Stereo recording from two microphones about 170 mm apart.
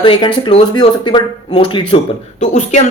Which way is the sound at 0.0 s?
30° left (ahead or behind).